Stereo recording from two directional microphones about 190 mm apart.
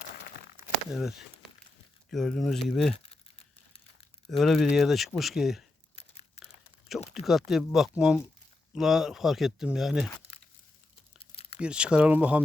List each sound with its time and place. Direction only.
0.9 s speech: centre (ahead or behind)
4.3 s speech: centre (ahead or behind)
6.0 s crumpling: 30° left (ahead or behind)
7.1 s speech: centre (ahead or behind)
10.3 s crumpling: 30° left (ahead or behind)
11.6 s speech: 5° right (ahead or behind)